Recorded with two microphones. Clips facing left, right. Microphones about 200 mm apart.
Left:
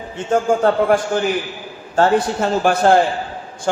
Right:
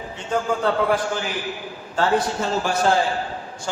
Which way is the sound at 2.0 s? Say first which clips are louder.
Left 5 dB; 55° left (ahead or behind).